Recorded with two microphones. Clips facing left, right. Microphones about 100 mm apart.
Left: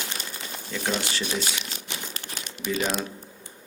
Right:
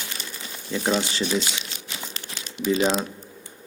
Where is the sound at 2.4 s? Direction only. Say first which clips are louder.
Left 1 dB; 50° left (ahead or behind).